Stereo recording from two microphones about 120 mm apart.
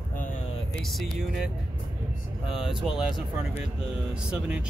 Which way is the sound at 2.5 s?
5° right (ahead or behind).